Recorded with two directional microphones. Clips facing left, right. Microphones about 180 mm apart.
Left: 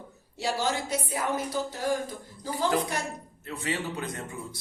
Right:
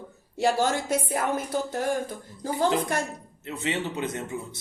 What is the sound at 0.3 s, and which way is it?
Speech, 55° right (ahead or behind).